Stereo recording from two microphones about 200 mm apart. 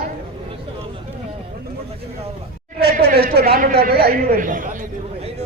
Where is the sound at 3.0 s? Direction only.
50° right (ahead or behind); by 5.4 s 35° right (ahead or behind).